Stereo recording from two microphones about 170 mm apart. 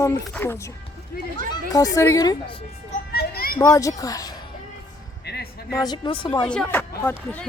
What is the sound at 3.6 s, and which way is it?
Speech, 20° left (ahead or behind).